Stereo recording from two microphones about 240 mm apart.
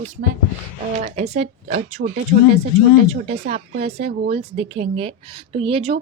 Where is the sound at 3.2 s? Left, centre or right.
Right.